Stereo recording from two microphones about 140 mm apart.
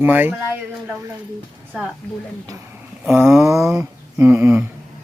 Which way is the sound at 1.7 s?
5° right (ahead or behind).